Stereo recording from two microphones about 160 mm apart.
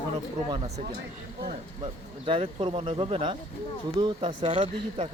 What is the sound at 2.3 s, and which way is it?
Speech, 30° right (ahead or behind).